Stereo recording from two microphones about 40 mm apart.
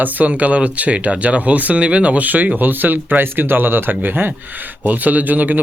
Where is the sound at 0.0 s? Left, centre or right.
Right.